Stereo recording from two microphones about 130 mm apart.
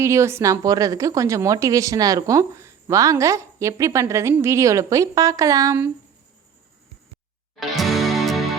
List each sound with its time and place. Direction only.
0.0 s a woman's voice: 20° right (ahead or behind)
7.8 s music: centre (ahead or behind)